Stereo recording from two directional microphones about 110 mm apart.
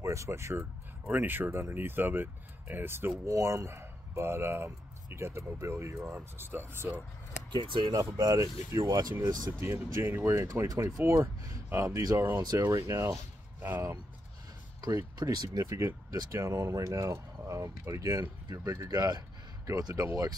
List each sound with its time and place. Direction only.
0.0 s speech: 25° right (ahead or behind)
0.6 s speech: 15° right (ahead or behind)
7.5 s speech: 50° right (ahead or behind)
7.9 s speech: 35° right (ahead or behind)
9.9 s speech: 25° right (ahead or behind)
14.8 s speech: 35° right (ahead or behind)